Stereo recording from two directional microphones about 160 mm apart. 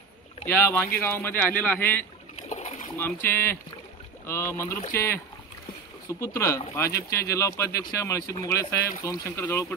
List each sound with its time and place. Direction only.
0.5 s speech: 15° left (ahead or behind)